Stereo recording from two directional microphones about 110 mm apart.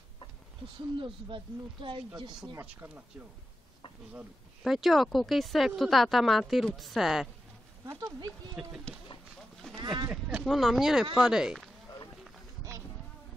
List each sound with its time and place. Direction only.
0.9 s speech: 50° right (ahead or behind)
2.6 s speech: 15° right (ahead or behind)
4.7 s a woman's voice: centre (ahead or behind)
7.8 s speech: 30° right (ahead or behind)
9.8 s a sound: 45° right (ahead or behind)
10.3 s a woman's voice: centre (ahead or behind)